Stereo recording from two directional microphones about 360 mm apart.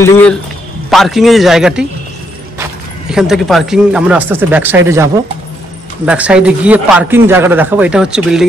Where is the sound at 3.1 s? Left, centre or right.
Centre.